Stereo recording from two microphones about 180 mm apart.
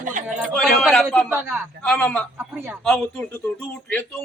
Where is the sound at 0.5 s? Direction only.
Centre (ahead or behind).